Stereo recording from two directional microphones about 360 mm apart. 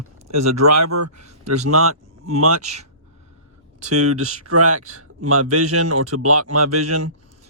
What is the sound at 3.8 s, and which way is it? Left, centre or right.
Speech, right.